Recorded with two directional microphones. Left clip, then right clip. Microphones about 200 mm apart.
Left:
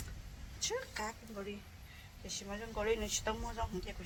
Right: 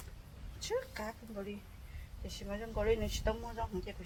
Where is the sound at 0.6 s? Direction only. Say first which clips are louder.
Right 1 dB; 15° right (ahead or behind).